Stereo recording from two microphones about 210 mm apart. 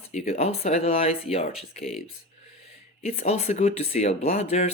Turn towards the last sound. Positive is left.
turn(degrees=30)  # may be behind; listen again after turning